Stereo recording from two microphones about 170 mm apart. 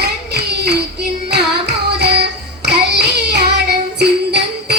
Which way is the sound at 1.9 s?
75° right (ahead or behind).